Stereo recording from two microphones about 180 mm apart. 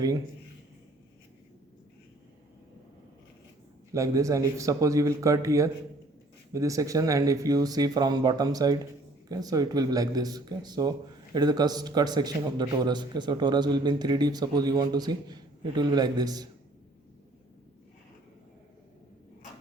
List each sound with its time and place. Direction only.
3.9 s a man's voice: 20° right (ahead or behind)